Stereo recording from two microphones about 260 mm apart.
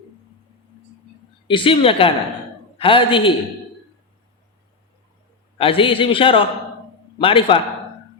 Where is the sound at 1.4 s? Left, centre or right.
Centre.